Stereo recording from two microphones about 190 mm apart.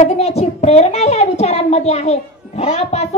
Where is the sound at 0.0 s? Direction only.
35° left (ahead or behind).